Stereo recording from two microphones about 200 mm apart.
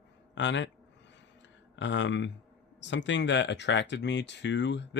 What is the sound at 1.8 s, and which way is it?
Speech, 65° left (ahead or behind).